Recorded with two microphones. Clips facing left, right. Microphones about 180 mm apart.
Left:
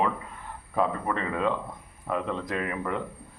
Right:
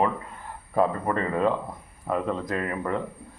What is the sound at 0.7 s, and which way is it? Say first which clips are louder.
Speech: right 3 dB; 40° right (ahead or behind).